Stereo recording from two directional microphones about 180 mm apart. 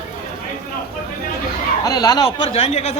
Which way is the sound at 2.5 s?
35° left (ahead or behind).